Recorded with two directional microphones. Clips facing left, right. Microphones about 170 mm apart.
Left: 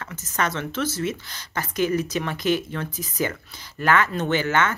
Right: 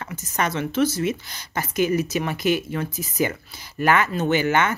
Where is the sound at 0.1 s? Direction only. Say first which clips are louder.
Right 1 dB; 10° right (ahead or behind).